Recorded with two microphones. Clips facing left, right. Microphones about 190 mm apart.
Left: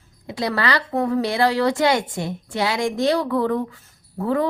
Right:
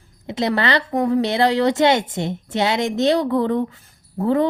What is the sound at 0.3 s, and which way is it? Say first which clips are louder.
A woman's voice: right 3 dB; 25° right (ahead or behind).